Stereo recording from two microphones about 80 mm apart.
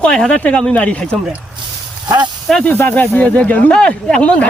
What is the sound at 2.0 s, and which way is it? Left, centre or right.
Speech, right.